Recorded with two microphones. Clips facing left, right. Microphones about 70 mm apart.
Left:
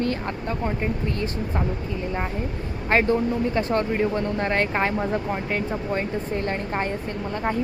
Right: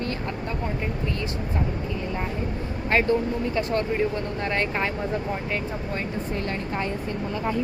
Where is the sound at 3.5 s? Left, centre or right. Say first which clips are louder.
Left 2 dB; left.